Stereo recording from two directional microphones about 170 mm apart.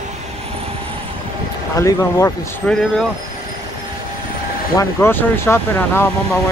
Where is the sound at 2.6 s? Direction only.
10° left (ahead or behind).